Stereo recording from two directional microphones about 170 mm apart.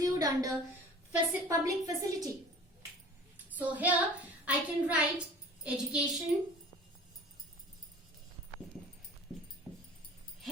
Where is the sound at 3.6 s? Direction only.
10° right (ahead or behind).